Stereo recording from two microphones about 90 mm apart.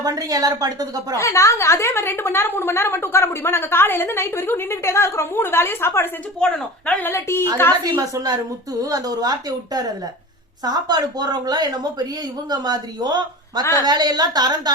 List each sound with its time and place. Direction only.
0.0 s speech: 45° right (ahead or behind)
1.1 s a woman's voice: 35° left (ahead or behind)
6.4 s a woman's voice: 10° left (ahead or behind); by 7.4 s 25° left (ahead or behind)
7.9 s speech: 45° right (ahead or behind)